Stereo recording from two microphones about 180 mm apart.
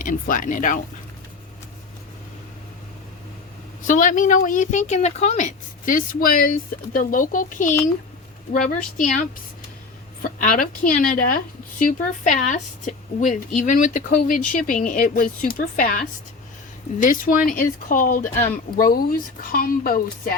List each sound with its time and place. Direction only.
0.0 s speech: 50° left (ahead or behind)
3.8 s speech: 45° left (ahead or behind)
9.0 s speech: 45° left (ahead or behind)
10.3 s speech: 50° left (ahead or behind)